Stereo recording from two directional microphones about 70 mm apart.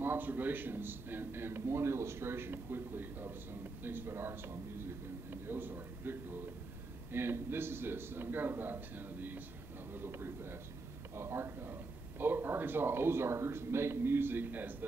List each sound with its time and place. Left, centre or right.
0.0 s a man's voice: right